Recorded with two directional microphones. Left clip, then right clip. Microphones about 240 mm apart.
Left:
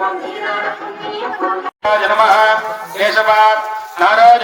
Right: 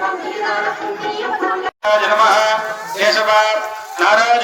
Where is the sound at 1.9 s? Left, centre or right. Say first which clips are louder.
Left 1 dB; left.